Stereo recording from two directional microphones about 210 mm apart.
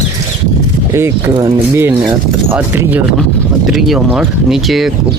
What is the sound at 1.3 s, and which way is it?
Speech, 25° right (ahead or behind).